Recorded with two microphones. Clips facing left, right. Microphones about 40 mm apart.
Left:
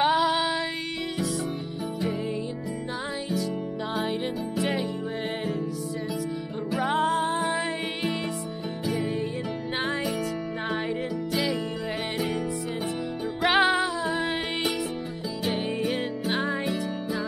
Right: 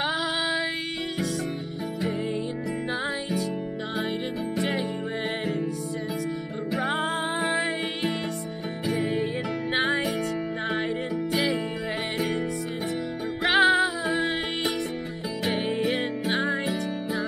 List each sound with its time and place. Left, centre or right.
0.0 s music: centre
4.6 s music: centre
6.7 s music: centre
13.4 s music: centre
15.4 s music: centre
16.3 s music: centre